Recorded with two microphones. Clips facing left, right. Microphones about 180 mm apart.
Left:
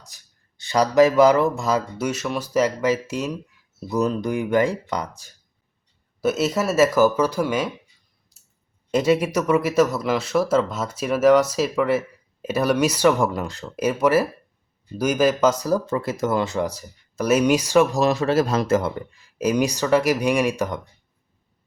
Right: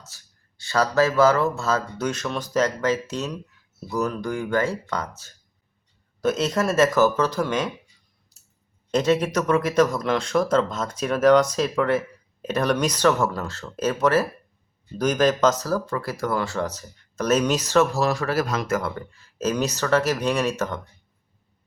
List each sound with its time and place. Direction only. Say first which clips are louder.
0.0 s speech: right 1 dB; 15° left (ahead or behind)
3.8 s speech: left 4 dB; 20° left (ahead or behind)
8.9 s speech: left 2 dB; 10° left (ahead or behind)